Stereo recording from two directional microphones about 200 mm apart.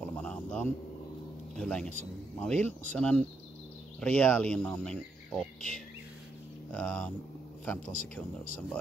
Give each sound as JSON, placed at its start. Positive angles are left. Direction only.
{"t": 0.0, "sound": "a sound", "side_deg": 5}
{"t": 1.5, "sound": "speech", "side_deg": 5}
{"t": 7.9, "sound": "speech", "side_deg": 45}